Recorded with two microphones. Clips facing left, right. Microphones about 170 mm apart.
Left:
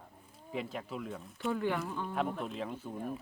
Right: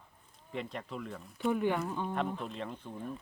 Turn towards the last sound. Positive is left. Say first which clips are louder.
# left 2 dB
turn(degrees=5)  # may be behind; listen again after turning